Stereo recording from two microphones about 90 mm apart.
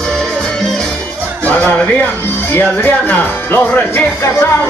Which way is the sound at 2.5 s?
20° left (ahead or behind).